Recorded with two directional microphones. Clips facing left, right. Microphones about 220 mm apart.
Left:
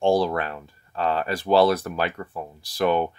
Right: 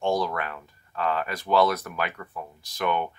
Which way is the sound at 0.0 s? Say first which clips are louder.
Left 5 dB; 30° left (ahead or behind).